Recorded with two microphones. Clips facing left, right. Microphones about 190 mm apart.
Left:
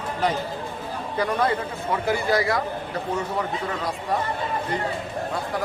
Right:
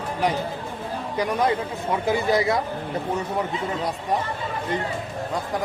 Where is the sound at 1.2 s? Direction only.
15° right (ahead or behind).